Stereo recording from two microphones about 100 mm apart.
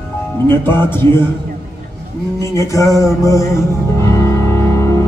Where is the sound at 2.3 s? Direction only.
30° left (ahead or behind).